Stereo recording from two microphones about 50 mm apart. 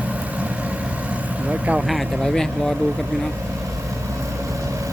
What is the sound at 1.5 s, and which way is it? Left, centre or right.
Vehicle, right.